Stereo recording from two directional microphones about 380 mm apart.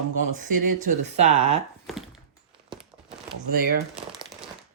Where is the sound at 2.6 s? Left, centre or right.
Centre.